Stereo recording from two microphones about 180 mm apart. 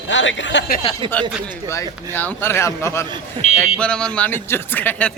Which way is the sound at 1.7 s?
15° left (ahead or behind).